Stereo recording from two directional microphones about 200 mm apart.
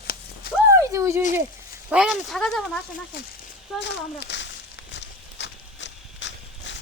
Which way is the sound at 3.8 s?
60° left (ahead or behind).